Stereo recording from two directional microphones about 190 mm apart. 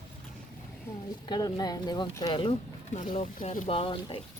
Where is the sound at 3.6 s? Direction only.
30° left (ahead or behind).